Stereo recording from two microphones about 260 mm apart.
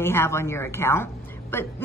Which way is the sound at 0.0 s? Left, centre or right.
Centre.